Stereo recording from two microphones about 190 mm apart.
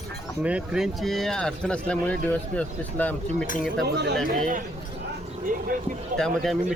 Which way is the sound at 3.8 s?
60° right (ahead or behind).